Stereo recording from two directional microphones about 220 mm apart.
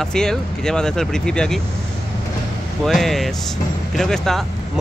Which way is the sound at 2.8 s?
Centre (ahead or behind).